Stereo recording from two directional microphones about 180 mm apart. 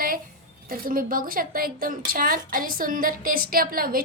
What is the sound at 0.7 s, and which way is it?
A woman's voice, 50° right (ahead or behind).